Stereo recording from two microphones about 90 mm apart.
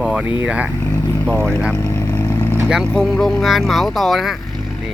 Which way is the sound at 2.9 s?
5° left (ahead or behind).